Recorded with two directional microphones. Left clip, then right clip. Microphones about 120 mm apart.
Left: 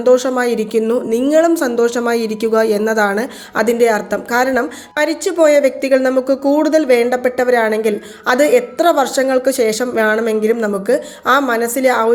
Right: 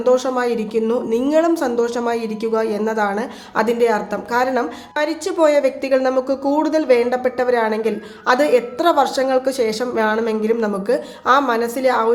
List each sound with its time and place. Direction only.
0.0 s a woman's voice: 30° left (ahead or behind)